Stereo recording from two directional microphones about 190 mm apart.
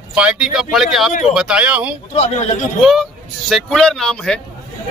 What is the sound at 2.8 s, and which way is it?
A man's voice, centre (ahead or behind).